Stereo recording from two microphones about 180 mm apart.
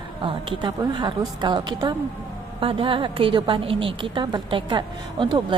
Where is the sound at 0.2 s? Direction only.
25° right (ahead or behind).